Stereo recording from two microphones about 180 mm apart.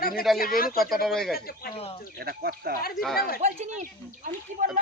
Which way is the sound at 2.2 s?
60° right (ahead or behind).